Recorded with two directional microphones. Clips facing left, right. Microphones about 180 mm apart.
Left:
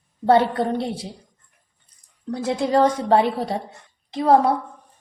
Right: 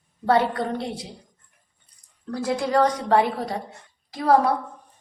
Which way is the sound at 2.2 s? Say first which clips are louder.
Left 2 dB; 20° left (ahead or behind).